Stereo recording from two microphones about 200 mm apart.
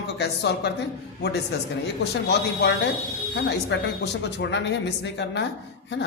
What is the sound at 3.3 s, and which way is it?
Speech, 60° left (ahead or behind).